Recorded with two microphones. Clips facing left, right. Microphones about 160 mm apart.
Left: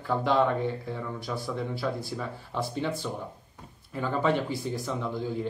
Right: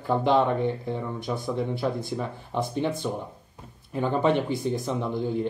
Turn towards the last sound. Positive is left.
turn(degrees=-20)  # may be behind; listen again after turning